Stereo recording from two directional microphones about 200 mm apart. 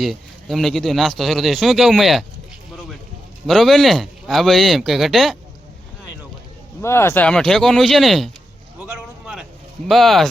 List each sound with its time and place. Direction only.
0.0 s speech: centre (ahead or behind)
3.4 s speech: centre (ahead or behind)
6.8 s speech: 15° left (ahead or behind)
8.9 s a sound: 5° right (ahead or behind)
9.9 s speech: centre (ahead or behind)